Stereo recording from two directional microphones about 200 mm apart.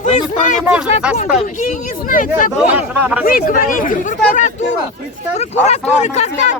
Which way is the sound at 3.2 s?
45° left (ahead or behind).